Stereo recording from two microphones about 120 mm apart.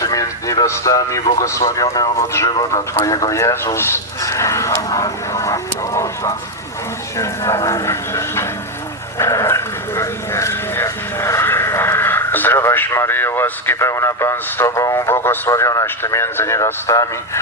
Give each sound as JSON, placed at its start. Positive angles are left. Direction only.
{"t": 0.0, "sound": "speech", "side_deg": 30}
{"t": 9.1, "sound": "dog", "side_deg": 25}